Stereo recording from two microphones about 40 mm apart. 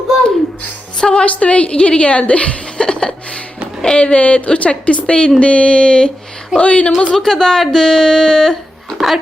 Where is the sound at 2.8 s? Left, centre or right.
Left.